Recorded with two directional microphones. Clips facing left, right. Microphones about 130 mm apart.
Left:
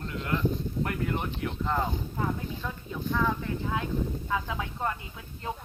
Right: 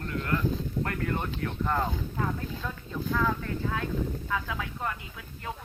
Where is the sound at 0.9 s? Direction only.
15° left (ahead or behind).